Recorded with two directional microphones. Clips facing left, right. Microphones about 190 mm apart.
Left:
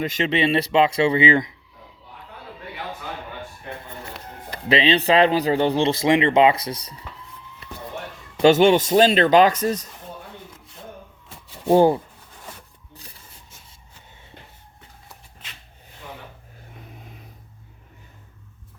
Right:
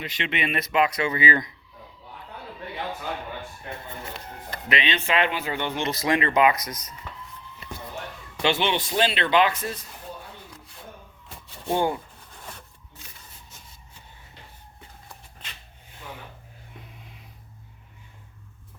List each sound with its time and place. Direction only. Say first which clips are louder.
0.0 s speech: left 8 dB; 45° left (ahead or behind); by 1.5 s 25° left (ahead or behind)
4.7 s speech: left 8 dB; 30° left (ahead or behind)
8.4 s speech: left 10 dB; 45° left (ahead or behind)
11.7 s speech: left 9 dB; 35° left (ahead or behind)
12.9 s rub: left 6 dB; 35° left (ahead or behind)
17.0 s a sound: left 5 dB; 45° left (ahead or behind)